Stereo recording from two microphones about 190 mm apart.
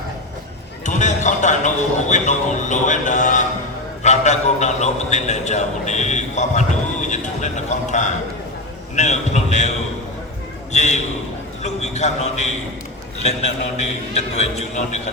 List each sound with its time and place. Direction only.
0.9 s a man's voice: 40° left (ahead or behind)
9.0 s a sound: 40° left (ahead or behind)
10.7 s a man's voice: 35° left (ahead or behind)